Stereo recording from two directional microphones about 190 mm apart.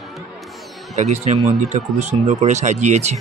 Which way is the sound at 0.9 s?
35° right (ahead or behind).